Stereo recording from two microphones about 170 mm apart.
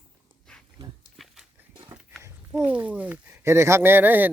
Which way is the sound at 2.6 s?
10° right (ahead or behind).